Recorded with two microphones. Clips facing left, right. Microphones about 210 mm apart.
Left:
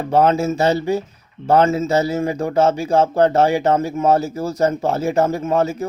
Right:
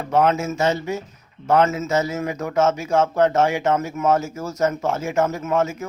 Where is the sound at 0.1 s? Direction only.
35° left (ahead or behind).